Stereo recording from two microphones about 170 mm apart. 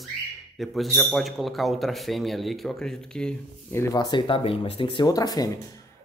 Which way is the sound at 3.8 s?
20° left (ahead or behind).